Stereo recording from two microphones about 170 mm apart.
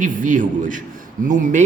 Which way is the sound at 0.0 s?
50° right (ahead or behind).